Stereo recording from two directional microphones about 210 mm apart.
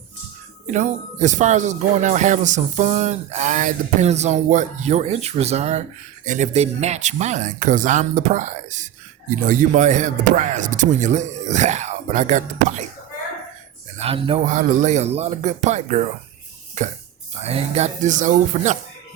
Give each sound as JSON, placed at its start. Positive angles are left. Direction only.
{"t": 0.7, "sound": "speech", "side_deg": -35}
{"t": 14.0, "sound": "a man's voice", "side_deg": -25}